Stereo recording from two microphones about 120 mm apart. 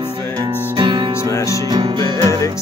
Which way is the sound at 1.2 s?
25° left (ahead or behind).